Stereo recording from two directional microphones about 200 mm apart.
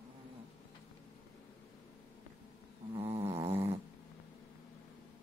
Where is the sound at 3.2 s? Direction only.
15° right (ahead or behind).